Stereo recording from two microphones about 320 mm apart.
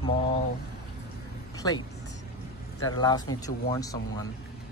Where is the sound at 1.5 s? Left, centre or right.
Centre.